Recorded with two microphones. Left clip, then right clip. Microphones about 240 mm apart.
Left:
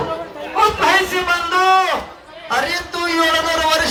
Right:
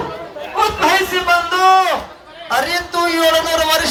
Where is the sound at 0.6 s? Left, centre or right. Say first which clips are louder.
Even; right.